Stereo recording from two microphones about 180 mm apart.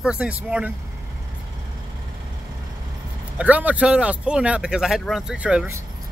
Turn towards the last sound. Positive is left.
turn(degrees=-10)  # may be behind; listen again after turning